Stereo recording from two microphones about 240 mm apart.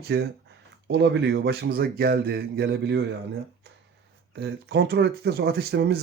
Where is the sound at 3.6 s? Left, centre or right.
Right.